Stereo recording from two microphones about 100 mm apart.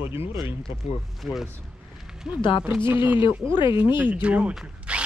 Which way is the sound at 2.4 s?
50° left (ahead or behind).